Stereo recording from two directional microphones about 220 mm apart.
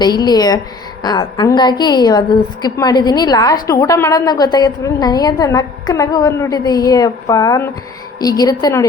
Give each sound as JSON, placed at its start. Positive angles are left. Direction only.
{"t": 0.0, "sound": "a woman's voice", "side_deg": 20}